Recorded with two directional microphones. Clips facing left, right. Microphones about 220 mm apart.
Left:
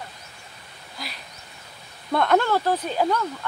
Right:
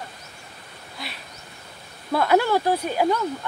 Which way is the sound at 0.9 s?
Centre (ahead or behind).